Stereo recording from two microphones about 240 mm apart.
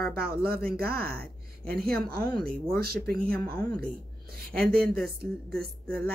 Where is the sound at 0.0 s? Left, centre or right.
Right.